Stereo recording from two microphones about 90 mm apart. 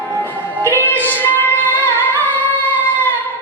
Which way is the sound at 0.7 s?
20° left (ahead or behind).